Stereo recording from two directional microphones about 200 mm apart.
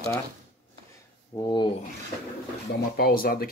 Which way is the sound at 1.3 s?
20° left (ahead or behind).